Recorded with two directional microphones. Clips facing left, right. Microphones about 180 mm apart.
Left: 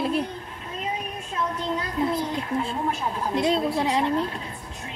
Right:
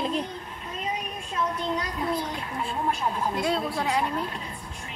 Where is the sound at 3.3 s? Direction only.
20° left (ahead or behind).